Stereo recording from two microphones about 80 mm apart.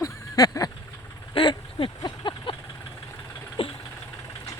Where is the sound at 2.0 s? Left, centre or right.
Left.